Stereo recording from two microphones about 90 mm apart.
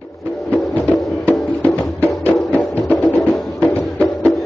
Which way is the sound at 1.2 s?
15° left (ahead or behind).